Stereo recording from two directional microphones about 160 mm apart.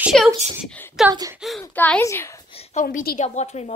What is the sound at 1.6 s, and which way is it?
Speech, 15° left (ahead or behind).